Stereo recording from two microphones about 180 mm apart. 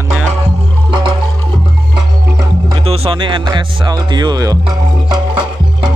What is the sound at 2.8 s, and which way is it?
Speech, 35° right (ahead or behind).